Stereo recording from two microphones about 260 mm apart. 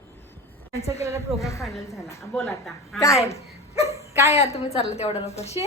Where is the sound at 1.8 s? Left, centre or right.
Centre.